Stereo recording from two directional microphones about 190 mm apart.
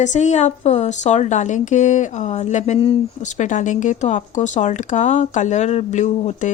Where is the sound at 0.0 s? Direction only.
40° left (ahead or behind).